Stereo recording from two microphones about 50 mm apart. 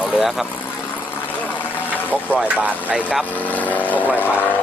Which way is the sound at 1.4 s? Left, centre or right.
Left.